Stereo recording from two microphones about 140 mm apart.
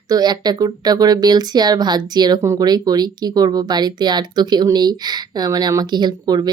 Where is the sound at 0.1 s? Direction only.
30° right (ahead or behind).